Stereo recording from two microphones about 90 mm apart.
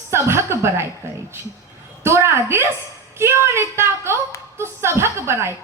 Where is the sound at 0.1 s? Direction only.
30° right (ahead or behind).